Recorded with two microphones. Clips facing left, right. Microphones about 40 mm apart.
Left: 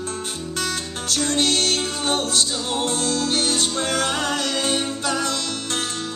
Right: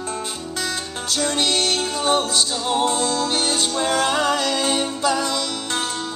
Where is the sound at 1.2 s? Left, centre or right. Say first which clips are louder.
Even; right.